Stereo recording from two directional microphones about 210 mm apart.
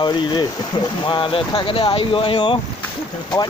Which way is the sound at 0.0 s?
20° left (ahead or behind).